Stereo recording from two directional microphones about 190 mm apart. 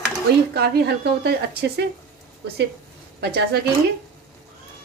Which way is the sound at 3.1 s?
60° right (ahead or behind).